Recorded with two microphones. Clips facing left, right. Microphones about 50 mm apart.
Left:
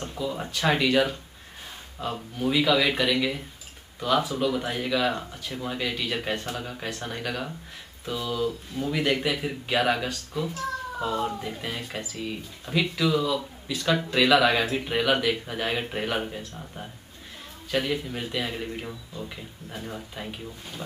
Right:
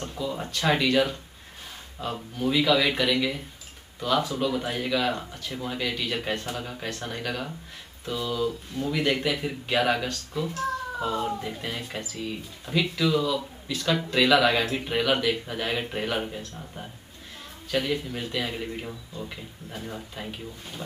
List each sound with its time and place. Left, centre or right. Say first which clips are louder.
0.0 s speech: even; centre